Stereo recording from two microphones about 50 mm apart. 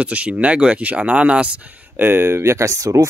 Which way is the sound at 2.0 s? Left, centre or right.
Right.